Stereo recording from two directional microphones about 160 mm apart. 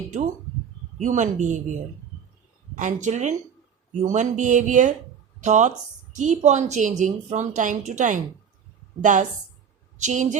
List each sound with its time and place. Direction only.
0.9 s a woman's voice: 50° right (ahead or behind)